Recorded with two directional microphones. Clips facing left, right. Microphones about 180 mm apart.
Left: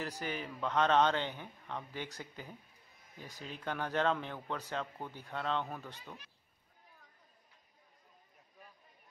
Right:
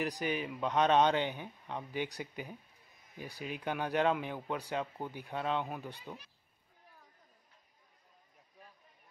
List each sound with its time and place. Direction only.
0.0 s speech: 15° right (ahead or behind)